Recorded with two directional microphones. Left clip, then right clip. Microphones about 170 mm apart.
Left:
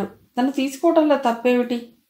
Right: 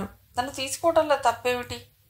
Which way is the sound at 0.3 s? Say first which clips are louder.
Left 6 dB; 30° right (ahead or behind).